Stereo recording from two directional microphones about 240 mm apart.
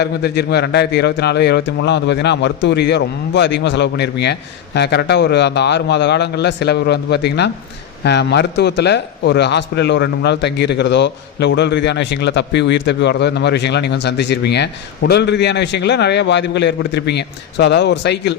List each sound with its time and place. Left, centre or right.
0.0 s a man's voice: left